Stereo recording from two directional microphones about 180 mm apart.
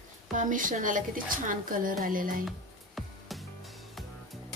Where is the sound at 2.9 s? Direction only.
Centre (ahead or behind).